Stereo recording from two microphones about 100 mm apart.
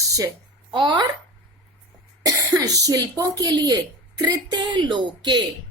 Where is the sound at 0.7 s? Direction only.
50° right (ahead or behind).